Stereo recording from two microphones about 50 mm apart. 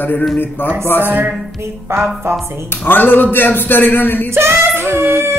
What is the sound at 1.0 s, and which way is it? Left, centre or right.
Music, right.